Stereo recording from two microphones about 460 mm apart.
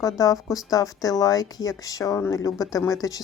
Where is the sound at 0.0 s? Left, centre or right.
Centre.